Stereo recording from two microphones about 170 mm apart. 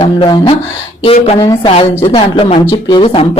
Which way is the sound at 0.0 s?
30° left (ahead or behind).